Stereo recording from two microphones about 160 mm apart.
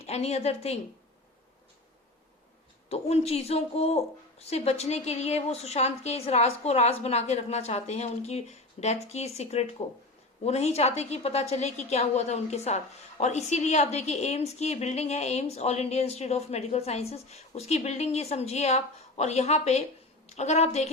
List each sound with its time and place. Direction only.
0.0 s a woman's voice: 40° left (ahead or behind)
2.9 s a woman's voice: 40° left (ahead or behind)